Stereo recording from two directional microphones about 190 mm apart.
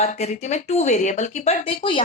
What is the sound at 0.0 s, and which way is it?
A woman's voice, 35° left (ahead or behind).